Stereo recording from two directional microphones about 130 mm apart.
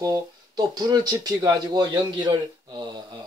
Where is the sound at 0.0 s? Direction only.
30° right (ahead or behind).